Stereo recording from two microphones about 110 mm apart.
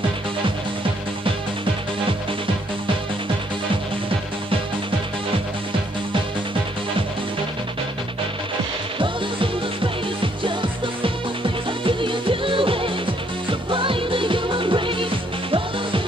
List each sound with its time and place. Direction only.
10.2 s music: 50° right (ahead or behind)